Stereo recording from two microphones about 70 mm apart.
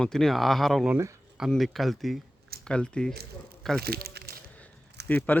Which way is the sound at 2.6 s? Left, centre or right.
Centre.